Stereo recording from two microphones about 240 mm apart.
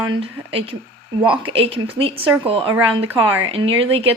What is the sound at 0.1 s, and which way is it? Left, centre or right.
A woman's voice, right.